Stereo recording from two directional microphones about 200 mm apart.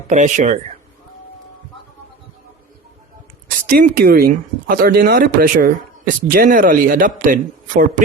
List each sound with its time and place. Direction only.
0.1 s speech: 40° right (ahead or behind)
3.7 s speech: 50° right (ahead or behind)